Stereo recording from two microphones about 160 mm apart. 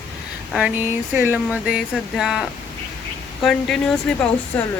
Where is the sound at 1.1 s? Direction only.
10° right (ahead or behind).